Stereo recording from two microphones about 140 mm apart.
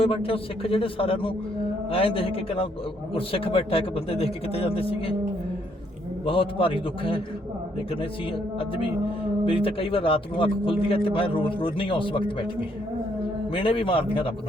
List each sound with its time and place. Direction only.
0.0 s a man's voice: 40° left (ahead or behind)
6.2 s a man's voice: 40° left (ahead or behind)
8.5 s a man's voice: 40° left (ahead or behind)
13.5 s a man's voice: 40° left (ahead or behind)